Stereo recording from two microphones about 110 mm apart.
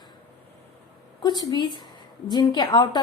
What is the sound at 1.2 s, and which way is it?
A woman's voice, 40° left (ahead or behind).